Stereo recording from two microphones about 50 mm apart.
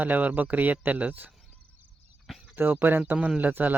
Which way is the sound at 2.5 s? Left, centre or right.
Right.